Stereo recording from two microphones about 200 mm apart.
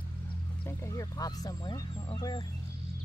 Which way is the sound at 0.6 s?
10° left (ahead or behind).